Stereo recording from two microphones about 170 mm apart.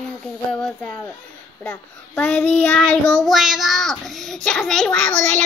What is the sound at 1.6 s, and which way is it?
Child singing, 10° left (ahead or behind).